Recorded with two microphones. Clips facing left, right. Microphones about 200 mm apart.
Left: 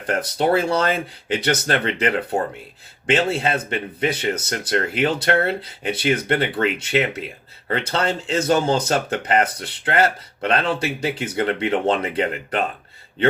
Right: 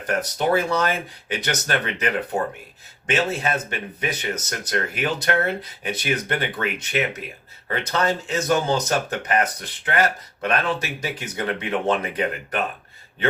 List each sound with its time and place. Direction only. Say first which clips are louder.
0.1 s speech: left 2 dB; 30° left (ahead or behind)
3.3 s speech: left 3 dB; 30° left (ahead or behind)